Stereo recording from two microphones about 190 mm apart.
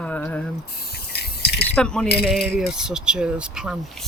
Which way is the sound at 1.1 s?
60° left (ahead or behind).